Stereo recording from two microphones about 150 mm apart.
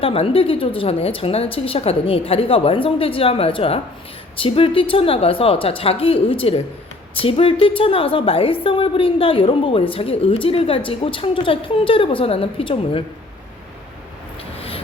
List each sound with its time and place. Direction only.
0.0 s a woman's voice: 40° left (ahead or behind)